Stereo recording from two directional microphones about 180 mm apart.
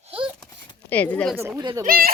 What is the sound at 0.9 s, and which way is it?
Speech, 10° left (ahead or behind).